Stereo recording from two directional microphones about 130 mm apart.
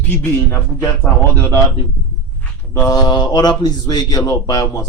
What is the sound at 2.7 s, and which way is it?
Speech, 25° left (ahead or behind).